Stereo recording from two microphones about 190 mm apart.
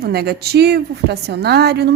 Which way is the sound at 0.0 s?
55° right (ahead or behind).